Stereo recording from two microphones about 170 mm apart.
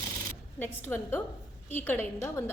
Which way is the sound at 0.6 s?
10° left (ahead or behind).